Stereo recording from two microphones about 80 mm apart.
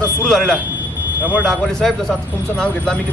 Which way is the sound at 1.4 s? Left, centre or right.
Centre.